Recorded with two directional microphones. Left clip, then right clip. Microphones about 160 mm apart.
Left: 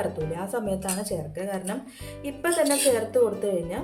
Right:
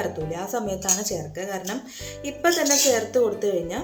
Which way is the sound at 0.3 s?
25° right (ahead or behind).